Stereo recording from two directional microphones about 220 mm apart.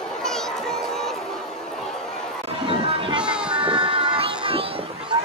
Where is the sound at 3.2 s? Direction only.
5° right (ahead or behind).